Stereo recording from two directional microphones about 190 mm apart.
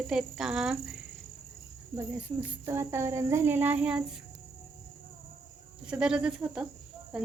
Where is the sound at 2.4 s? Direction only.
15° right (ahead or behind).